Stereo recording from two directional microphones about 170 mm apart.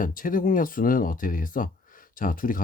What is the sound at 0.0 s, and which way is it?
Speech, 55° left (ahead or behind).